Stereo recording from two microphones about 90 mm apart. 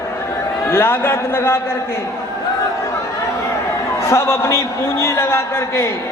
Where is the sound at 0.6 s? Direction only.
25° left (ahead or behind).